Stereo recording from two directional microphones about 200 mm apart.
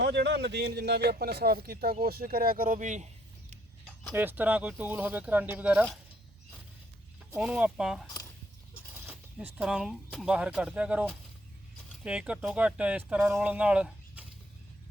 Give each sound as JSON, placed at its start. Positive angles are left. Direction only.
{"t": 0.0, "sound": "speech", "side_deg": -60}
{"t": 4.1, "sound": "speech", "side_deg": -10}
{"t": 7.3, "sound": "speech", "side_deg": -5}
{"t": 9.0, "sound": "speech", "side_deg": -5}